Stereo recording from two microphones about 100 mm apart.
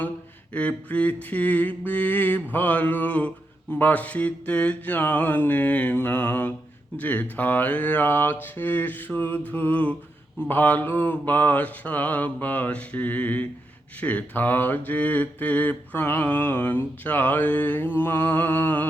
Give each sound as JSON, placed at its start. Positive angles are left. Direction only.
{"t": 0.5, "sound": "mantra", "side_deg": 15}